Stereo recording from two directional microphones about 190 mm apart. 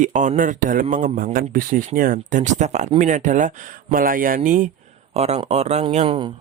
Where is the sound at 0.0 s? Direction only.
40° right (ahead or behind).